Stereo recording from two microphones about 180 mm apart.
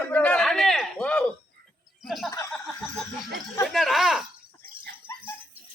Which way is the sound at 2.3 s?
15° left (ahead or behind).